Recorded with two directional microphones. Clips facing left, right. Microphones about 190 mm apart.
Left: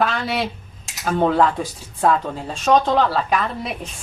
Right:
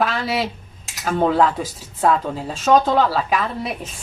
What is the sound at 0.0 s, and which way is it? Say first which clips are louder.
Cutlery: even; centre (ahead or behind).